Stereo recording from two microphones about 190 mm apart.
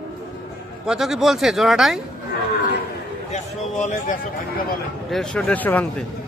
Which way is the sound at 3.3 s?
40° left (ahead or behind).